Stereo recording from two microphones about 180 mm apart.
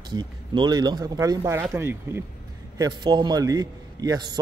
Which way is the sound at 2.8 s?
25° right (ahead or behind).